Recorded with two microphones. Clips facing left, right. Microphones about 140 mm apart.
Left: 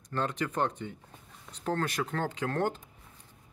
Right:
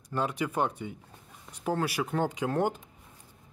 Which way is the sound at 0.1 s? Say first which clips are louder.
Right 2 dB; 10° right (ahead or behind).